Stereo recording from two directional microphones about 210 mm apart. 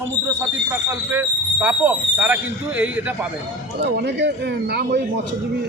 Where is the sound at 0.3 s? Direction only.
10° right (ahead or behind).